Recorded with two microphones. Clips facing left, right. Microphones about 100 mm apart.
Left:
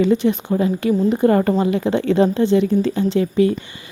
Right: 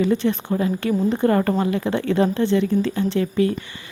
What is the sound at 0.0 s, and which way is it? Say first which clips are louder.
A woman's voice: left 3 dB; 20° left (ahead or behind).